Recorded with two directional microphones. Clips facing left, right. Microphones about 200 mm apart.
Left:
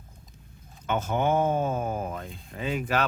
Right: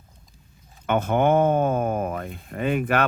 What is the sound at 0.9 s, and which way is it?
Speech, 60° right (ahead or behind).